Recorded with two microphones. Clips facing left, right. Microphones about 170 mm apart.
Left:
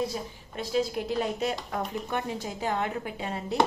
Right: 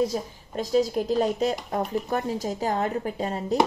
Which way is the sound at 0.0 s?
40° right (ahead or behind).